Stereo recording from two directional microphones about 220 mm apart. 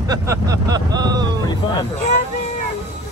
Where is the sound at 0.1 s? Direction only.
15° right (ahead or behind).